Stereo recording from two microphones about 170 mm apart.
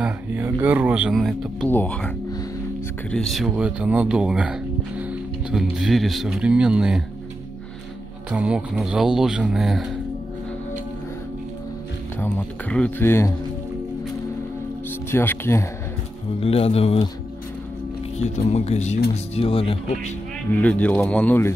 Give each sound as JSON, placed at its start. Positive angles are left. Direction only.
{"t": 0.0, "sound": "speech", "side_deg": -10}
{"t": 8.3, "sound": "speech", "side_deg": -5}
{"t": 12.2, "sound": "speech", "side_deg": 10}
{"t": 15.0, "sound": "speech", "side_deg": 15}
{"t": 16.3, "sound": "speech", "side_deg": 35}
{"t": 18.2, "sound": "speech", "side_deg": 40}
{"t": 20.5, "sound": "speech", "side_deg": 10}